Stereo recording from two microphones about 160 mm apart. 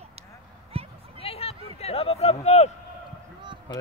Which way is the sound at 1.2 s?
40° left (ahead or behind).